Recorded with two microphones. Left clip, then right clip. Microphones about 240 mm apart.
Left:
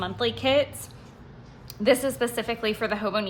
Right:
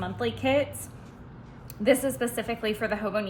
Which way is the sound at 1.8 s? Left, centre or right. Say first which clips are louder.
Left 2 dB; centre.